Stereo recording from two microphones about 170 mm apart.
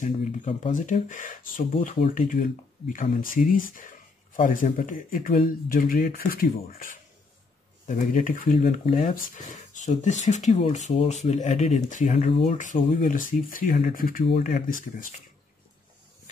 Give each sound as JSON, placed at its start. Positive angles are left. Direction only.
{"t": 0.0, "sound": "speech", "side_deg": 45}
{"t": 2.9, "sound": "speech", "side_deg": 50}
{"t": 7.8, "sound": "speech", "side_deg": 50}
{"t": 8.5, "sound": "speech", "side_deg": 35}
{"t": 8.9, "sound": "speech", "side_deg": 55}
{"t": 12.3, "sound": "speech", "side_deg": 35}
{"t": 12.5, "sound": "speech", "side_deg": 50}